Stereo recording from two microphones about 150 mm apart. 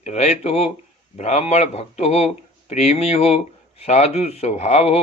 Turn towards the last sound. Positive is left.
turn(degrees=45)  # may be behind; listen again after turning